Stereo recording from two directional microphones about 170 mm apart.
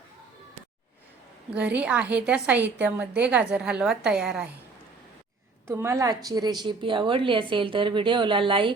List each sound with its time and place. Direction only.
1.5 s a woman's voice: 10° right (ahead or behind)
5.6 s a woman's voice: 15° right (ahead or behind)